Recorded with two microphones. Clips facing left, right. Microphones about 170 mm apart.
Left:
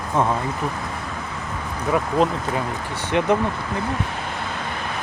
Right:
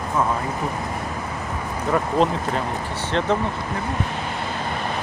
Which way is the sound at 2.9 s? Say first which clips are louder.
Left 3 dB; 15° left (ahead or behind).